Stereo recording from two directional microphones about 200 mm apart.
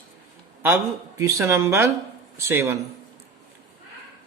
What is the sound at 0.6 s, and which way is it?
Speech, 15° right (ahead or behind).